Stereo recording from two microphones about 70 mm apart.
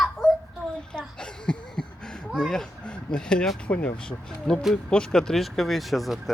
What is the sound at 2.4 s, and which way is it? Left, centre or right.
Speech, centre.